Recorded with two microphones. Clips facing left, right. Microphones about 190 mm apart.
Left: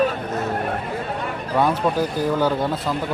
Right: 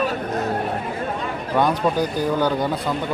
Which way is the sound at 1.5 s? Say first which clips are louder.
Even; 5° left (ahead or behind).